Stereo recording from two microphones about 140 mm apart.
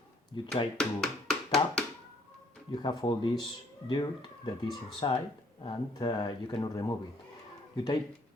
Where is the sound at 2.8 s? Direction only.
35° left (ahead or behind).